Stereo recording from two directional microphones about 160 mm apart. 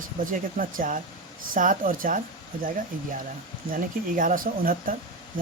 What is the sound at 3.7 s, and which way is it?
Speech, 60° right (ahead or behind).